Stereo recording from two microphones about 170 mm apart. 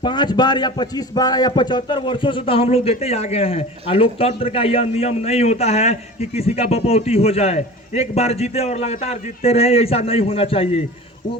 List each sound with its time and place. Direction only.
0.0 s a man's voice: 25° left (ahead or behind)